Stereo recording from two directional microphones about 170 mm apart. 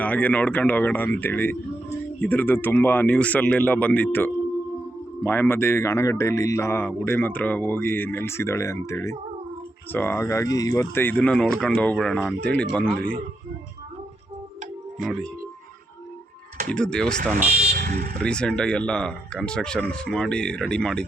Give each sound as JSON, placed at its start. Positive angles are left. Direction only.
{"t": 0.0, "sound": "a man's voice", "side_deg": 10}
{"t": 15.0, "sound": "speech", "side_deg": 5}
{"t": 16.6, "sound": "speech", "side_deg": 5}
{"t": 17.5, "sound": "vehicle", "side_deg": -60}
{"t": 18.2, "sound": "speech", "side_deg": 5}